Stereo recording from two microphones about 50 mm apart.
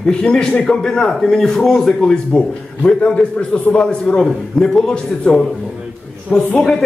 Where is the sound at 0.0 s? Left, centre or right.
Centre.